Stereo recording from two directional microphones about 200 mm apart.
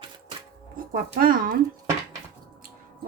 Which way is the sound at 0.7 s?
45° right (ahead or behind).